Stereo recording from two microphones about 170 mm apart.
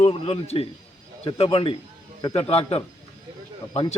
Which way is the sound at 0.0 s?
35° left (ahead or behind).